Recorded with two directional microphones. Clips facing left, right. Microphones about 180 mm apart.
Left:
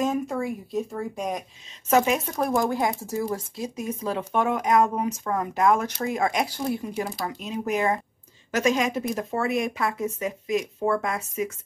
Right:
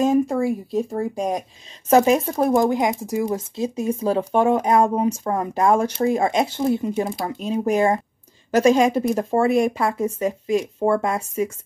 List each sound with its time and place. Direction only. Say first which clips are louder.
0.0 s a woman's voice: right 7 dB; 30° right (ahead or behind)